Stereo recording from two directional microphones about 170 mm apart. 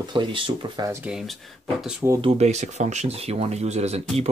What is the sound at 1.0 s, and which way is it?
Speech, centre (ahead or behind).